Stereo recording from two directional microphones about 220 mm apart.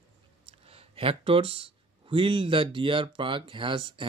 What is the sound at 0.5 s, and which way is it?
Speech, 25° right (ahead or behind).